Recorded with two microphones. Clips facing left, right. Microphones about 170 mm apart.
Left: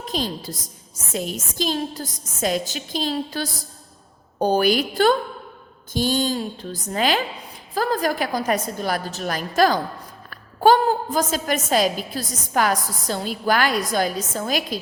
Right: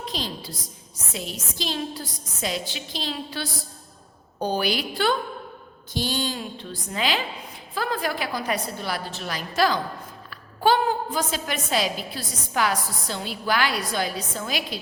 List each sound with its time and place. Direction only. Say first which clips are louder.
0.0 s a woman's voice: left 5 dB; 45° left (ahead or behind)